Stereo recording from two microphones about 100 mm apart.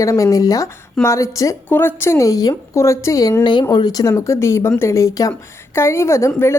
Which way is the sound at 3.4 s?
50° left (ahead or behind).